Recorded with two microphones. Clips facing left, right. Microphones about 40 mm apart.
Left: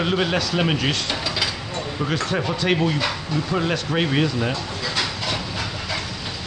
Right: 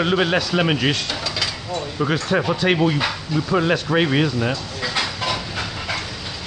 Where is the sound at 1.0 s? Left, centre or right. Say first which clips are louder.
Even; centre.